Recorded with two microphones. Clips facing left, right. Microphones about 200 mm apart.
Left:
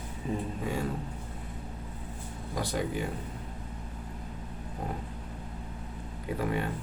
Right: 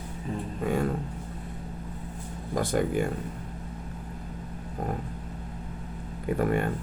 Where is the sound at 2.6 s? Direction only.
50° right (ahead or behind).